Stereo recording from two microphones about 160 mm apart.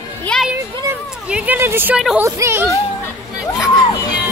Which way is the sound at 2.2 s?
15° right (ahead or behind).